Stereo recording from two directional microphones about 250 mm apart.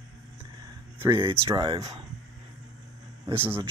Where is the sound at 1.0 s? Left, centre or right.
Right.